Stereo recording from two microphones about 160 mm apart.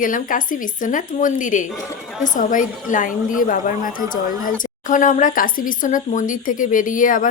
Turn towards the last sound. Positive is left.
turn(degrees=55)  # may be behind; listen again after turning